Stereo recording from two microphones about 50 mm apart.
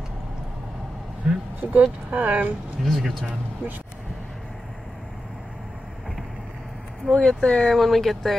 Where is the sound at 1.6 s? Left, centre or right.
Right.